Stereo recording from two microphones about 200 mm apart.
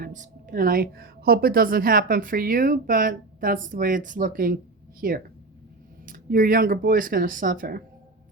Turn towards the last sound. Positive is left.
turn(degrees=-45)  # may be behind; listen again after turning